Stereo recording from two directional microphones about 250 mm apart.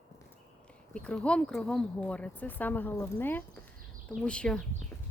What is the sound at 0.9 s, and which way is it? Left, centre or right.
Speech, centre.